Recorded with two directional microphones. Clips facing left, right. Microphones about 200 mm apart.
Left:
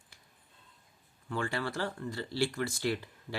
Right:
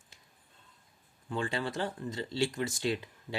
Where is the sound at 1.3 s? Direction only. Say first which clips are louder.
Right 1 dB; 20° right (ahead or behind).